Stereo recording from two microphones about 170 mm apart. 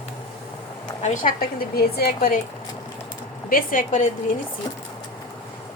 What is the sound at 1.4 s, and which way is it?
Speech, 65° left (ahead or behind).